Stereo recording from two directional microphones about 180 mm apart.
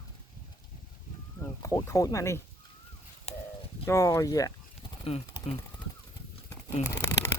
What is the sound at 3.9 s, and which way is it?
Speech, 15° left (ahead or behind).